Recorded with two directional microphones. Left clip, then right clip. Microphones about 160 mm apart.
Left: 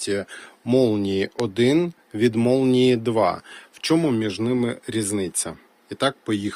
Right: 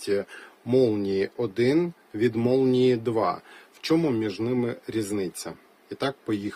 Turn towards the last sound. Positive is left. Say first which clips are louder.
# left 5 dB
turn(degrees=30)  # may be behind; listen again after turning